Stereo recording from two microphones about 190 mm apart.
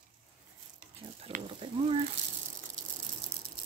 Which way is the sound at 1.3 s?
30° right (ahead or behind).